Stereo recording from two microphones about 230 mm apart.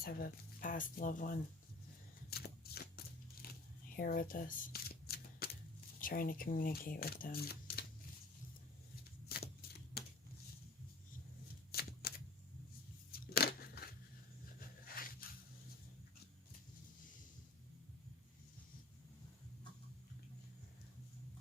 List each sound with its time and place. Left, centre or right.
0.0 s speech: left
2.3 s shuffling cards: left
3.4 s a sound: left
3.9 s shuffling cards: left
6.0 s speech: left
9.3 s shuffling cards: left
11.7 s shuffling cards: left
13.1 s a sound: left